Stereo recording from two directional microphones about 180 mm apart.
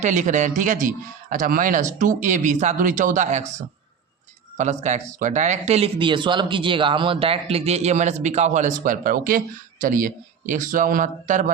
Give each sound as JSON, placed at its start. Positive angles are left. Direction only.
{"t": 0.0, "sound": "a man's voice", "side_deg": -40}
{"t": 4.5, "sound": "a man's voice", "side_deg": -40}